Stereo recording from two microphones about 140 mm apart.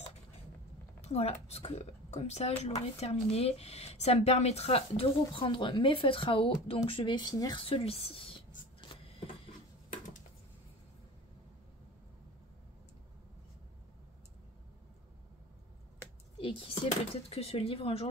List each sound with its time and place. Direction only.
1.0 s speech: 50° left (ahead or behind); by 7.6 s 25° left (ahead or behind)
7.6 s writing: 45° left (ahead or behind)
9.8 s a sound: 65° left (ahead or behind)
16.3 s speech: 40° left (ahead or behind)